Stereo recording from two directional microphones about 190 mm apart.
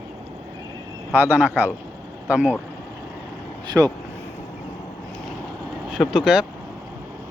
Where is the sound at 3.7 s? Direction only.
20° right (ahead or behind).